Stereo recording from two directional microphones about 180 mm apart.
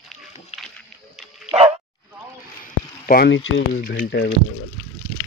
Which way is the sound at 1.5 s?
35° right (ahead or behind).